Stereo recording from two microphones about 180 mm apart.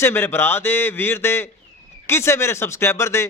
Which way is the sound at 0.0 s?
15° left (ahead or behind).